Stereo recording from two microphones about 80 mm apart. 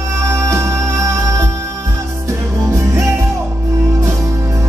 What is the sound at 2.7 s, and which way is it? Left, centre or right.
Music, right.